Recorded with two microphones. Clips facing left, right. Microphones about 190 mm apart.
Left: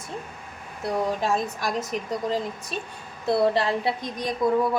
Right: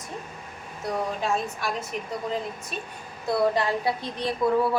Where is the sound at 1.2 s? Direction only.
40° left (ahead or behind).